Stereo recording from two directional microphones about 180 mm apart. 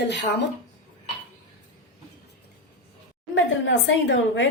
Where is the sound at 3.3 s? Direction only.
90° left.